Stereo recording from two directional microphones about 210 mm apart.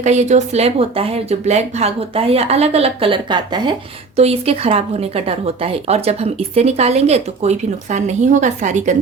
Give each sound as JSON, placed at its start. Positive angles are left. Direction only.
{"t": 0.0, "sound": "speech", "side_deg": -35}